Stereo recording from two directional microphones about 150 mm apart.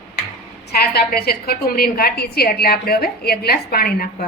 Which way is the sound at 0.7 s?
90° left.